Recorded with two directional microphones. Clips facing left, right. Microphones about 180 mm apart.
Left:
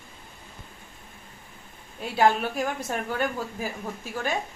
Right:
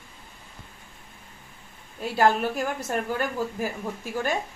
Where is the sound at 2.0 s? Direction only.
Centre (ahead or behind).